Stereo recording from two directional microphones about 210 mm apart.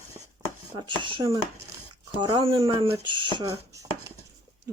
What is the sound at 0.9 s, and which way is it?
Speech, 20° right (ahead or behind).